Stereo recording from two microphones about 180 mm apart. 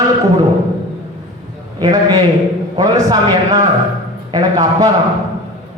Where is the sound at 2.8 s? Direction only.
20° right (ahead or behind).